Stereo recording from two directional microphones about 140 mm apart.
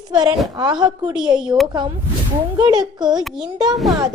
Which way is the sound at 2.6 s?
30° right (ahead or behind).